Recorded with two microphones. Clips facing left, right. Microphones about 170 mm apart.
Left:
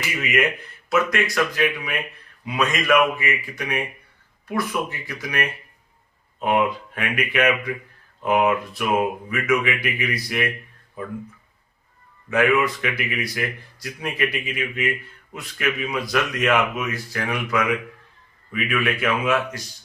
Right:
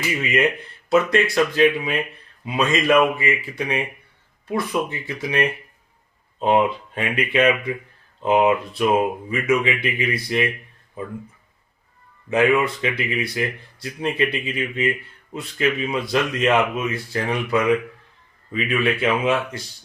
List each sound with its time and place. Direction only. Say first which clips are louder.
0.2 s speech: even; 30° right (ahead or behind)
12.3 s speech: right 1 dB; 25° right (ahead or behind)